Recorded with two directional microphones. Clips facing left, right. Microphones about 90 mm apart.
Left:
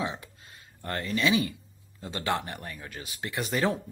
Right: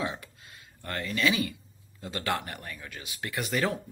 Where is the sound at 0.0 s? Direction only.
20° left (ahead or behind).